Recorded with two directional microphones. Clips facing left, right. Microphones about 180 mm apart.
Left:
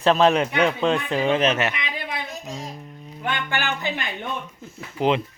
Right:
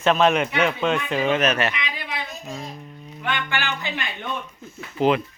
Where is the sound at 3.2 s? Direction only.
45° left (ahead or behind).